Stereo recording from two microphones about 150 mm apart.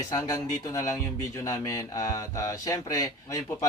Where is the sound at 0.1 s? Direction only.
25° left (ahead or behind).